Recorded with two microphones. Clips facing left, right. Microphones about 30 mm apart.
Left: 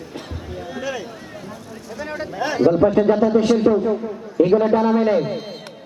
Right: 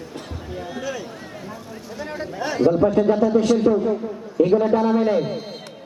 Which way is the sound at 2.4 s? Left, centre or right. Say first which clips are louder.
Left 2 dB; left.